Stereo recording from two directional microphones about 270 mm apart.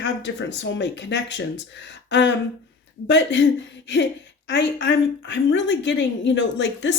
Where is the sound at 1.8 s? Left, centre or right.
Left.